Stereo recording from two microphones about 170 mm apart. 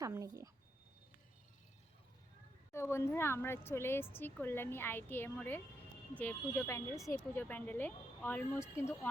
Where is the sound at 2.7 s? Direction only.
15° left (ahead or behind).